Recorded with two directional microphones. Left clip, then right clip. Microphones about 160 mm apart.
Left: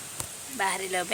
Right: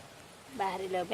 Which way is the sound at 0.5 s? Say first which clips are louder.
Left 5 dB; 5° left (ahead or behind).